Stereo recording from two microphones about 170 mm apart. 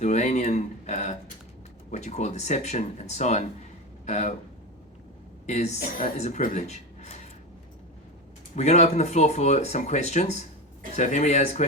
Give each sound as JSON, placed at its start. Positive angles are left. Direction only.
{"t": 0.0, "sound": "speech", "side_deg": 45}
{"t": 5.5, "sound": "speech", "side_deg": 40}
{"t": 8.5, "sound": "speech", "side_deg": 40}